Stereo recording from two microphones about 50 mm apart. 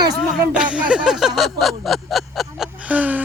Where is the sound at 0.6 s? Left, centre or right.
Right.